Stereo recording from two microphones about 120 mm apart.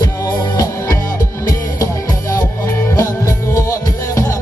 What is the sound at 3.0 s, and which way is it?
Music, 25° left (ahead or behind).